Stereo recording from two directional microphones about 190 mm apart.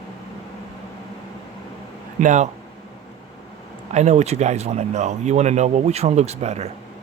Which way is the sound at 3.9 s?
35° right (ahead or behind).